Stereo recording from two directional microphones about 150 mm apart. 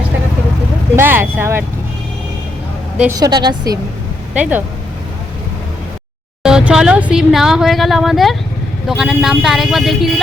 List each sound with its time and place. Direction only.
0.9 s speech: 15° right (ahead or behind)
3.1 s a woman's voice: 25° right (ahead or behind)
4.4 s speech: 10° right (ahead or behind)
6.4 s speech: 5° right (ahead or behind)